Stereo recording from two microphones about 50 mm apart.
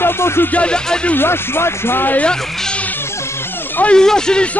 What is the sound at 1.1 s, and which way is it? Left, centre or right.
Music, left.